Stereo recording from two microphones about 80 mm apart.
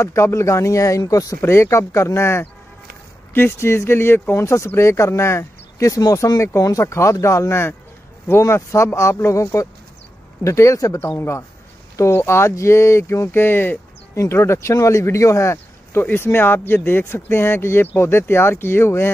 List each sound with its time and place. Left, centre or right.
0.0 s speech: left
1.4 s speech: left